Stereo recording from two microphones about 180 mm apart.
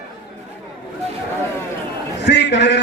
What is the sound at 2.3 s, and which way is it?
Speech, 70° left (ahead or behind).